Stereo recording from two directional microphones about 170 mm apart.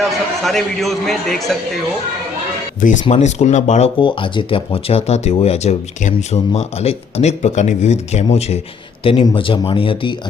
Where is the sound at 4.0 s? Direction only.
30° left (ahead or behind).